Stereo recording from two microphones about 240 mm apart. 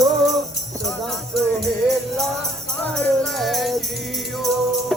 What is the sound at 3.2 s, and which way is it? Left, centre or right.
Music, centre.